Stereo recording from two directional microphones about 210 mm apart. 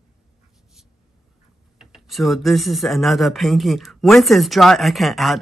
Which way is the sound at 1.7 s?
Centre (ahead or behind).